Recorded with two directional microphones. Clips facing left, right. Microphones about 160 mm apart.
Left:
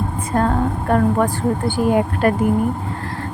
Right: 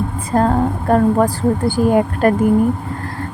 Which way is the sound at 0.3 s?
35° right (ahead or behind).